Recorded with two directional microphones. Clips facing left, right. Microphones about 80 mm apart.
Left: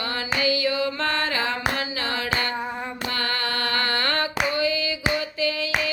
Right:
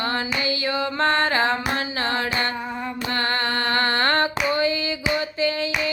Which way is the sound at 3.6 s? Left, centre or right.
Right.